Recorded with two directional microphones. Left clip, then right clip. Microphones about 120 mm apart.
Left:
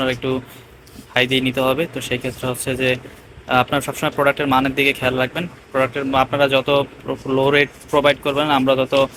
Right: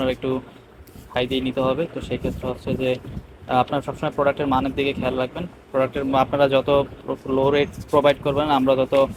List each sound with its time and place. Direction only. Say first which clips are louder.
0.0 s speech: left 3 dB; 25° right (ahead or behind)
7.1 s speech: left 4 dB; 20° right (ahead or behind)